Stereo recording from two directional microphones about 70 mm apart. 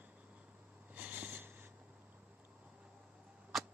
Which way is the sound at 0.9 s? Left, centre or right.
Right.